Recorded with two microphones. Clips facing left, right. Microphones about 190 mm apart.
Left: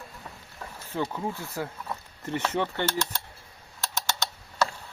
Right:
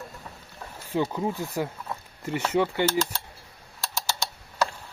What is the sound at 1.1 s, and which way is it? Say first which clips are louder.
Speech: right 4 dB; 15° right (ahead or behind).